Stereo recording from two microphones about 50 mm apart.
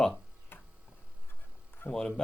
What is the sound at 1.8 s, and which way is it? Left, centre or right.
Speech, left.